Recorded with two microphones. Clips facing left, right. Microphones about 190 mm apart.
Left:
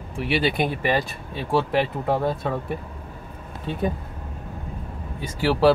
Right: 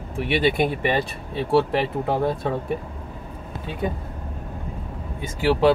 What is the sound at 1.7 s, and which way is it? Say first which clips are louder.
Speech: even; centre (ahead or behind).